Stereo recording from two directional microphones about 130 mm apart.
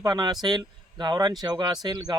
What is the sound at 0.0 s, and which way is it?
Speech, 30° right (ahead or behind).